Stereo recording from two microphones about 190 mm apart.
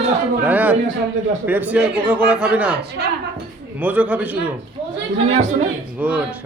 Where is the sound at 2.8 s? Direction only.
60° right (ahead or behind).